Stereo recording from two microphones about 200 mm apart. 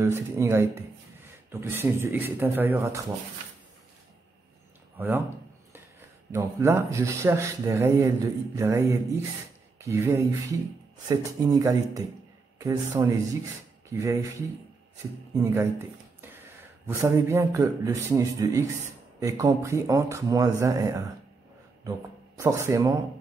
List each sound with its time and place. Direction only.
0.0 s speech: 15° right (ahead or behind)
4.9 s speech: 10° right (ahead or behind)
15.3 s speech: 15° right (ahead or behind)
16.8 s speech: 15° right (ahead or behind)
22.4 s speech: 15° right (ahead or behind)